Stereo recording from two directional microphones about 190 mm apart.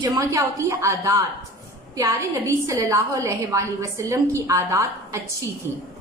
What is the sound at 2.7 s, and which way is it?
A woman's voice, 15° right (ahead or behind).